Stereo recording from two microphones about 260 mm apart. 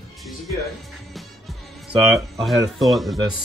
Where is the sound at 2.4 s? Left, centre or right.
Centre.